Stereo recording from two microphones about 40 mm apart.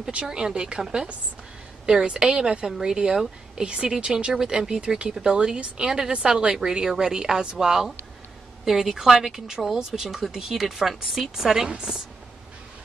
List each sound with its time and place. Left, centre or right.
0.1 s speech: right
1.9 s speech: centre
3.9 s a woman's voice: centre